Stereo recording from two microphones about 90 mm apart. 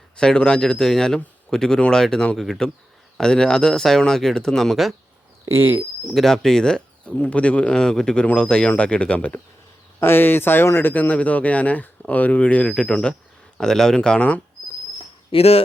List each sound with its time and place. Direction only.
0.2 s speech: 10° left (ahead or behind)
5.5 s speech: 25° right (ahead or behind)
6.0 s speech: centre (ahead or behind)
15.3 s speech: 90° left